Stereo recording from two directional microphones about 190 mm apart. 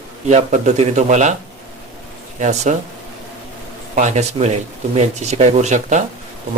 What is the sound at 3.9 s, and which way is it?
Speech, 40° right (ahead or behind).